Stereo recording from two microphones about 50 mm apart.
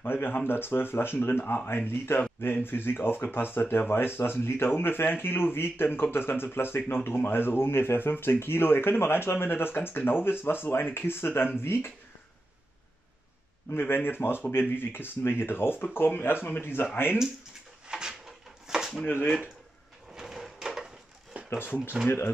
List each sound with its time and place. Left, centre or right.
0.0 s speech: left
13.7 s speech: left
17.8 s a sound: centre
19.0 s speech: left
20.2 s a sound: centre
21.5 s speech: left